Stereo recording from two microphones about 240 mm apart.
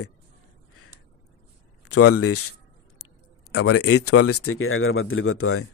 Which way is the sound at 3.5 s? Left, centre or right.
Left.